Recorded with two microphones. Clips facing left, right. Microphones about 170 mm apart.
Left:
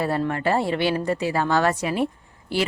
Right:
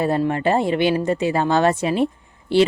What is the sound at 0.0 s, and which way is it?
Speech, 20° right (ahead or behind).